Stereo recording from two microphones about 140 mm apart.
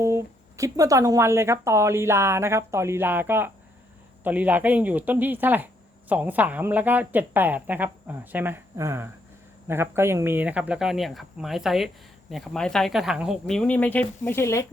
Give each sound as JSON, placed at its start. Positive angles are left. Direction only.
{"t": 0.0, "sound": "a woman's voice", "side_deg": -20}
{"t": 13.6, "sound": "speech", "side_deg": 10}